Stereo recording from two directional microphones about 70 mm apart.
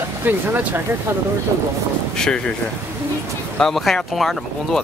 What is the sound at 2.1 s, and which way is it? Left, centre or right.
Speech, centre.